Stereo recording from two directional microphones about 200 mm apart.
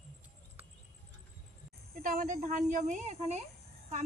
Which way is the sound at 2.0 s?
45° right (ahead or behind).